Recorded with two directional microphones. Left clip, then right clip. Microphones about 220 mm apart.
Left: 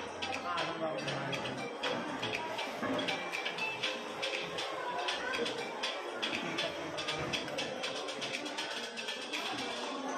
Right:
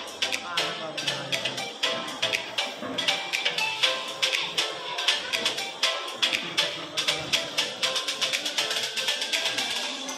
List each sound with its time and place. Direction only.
0.2 s music: 30° right (ahead or behind)